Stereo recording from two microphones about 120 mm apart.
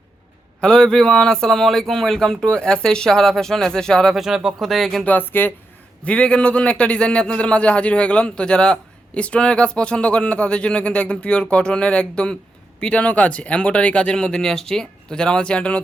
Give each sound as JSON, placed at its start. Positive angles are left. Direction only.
{"t": 0.6, "sound": "speech", "side_deg": 5}
{"t": 5.0, "sound": "a man's voice", "side_deg": 15}